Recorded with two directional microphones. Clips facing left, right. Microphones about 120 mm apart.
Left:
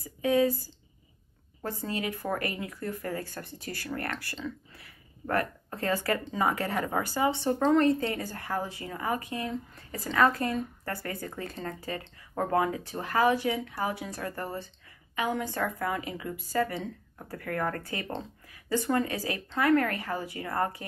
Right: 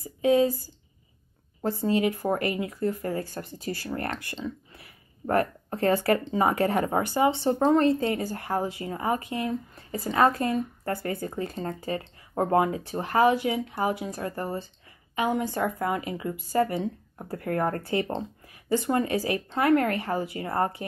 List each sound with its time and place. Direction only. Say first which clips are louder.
0.0 s speech: right 3 dB; 20° right (ahead or behind)
1.6 s a woman's voice: right 9 dB; 20° right (ahead or behind)
7.4 s a woman's voice: even; 20° right (ahead or behind)